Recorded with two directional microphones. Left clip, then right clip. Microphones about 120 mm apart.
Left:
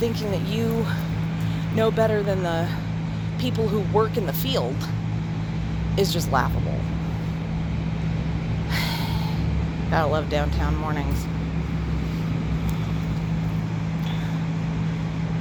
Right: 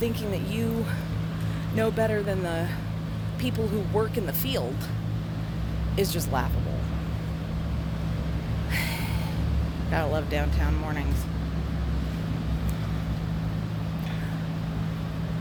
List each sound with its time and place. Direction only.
1.7 s speech: 20° right (ahead or behind)
3.9 s speech: 20° right (ahead or behind)
6.0 s speech: 15° right (ahead or behind)
9.9 s speech: 20° right (ahead or behind)